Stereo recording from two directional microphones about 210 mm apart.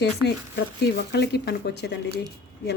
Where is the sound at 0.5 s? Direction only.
50° left (ahead or behind).